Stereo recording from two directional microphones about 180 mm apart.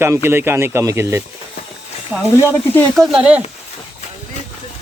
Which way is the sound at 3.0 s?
5° right (ahead or behind).